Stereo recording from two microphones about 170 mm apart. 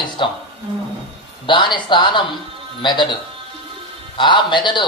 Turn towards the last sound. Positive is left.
turn(degrees=25)  # may be behind; listen again after turning